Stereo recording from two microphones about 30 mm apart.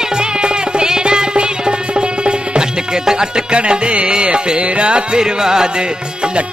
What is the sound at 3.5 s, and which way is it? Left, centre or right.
Music, right.